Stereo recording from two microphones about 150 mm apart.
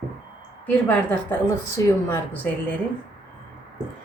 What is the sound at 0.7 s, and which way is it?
Speech, 15° left (ahead or behind).